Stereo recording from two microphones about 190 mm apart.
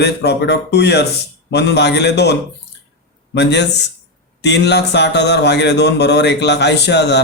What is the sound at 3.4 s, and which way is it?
Speech, 65° left (ahead or behind).